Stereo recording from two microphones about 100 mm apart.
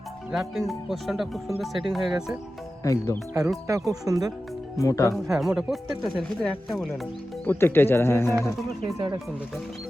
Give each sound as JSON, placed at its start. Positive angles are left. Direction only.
{"t": 0.3, "sound": "speech", "side_deg": 0}
{"t": 2.8, "sound": "speech", "side_deg": 30}
{"t": 3.7, "sound": "speech", "side_deg": -35}
{"t": 4.8, "sound": "speech", "side_deg": 30}
{"t": 5.4, "sound": "speech", "side_deg": -5}
{"t": 7.4, "sound": "speech", "side_deg": 20}